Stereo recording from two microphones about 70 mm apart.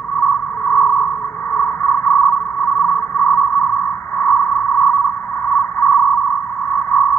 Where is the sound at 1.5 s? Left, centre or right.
Left.